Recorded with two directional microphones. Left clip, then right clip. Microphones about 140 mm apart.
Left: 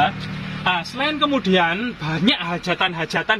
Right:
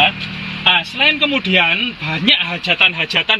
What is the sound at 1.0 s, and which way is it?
A man's voice, 15° left (ahead or behind).